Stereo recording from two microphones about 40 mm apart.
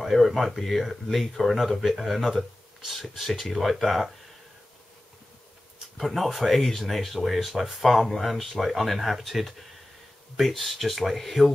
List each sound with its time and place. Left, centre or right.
0.0 s speech: centre
5.9 s speech: centre